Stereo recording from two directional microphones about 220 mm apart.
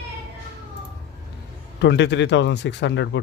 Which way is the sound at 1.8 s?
50° left (ahead or behind).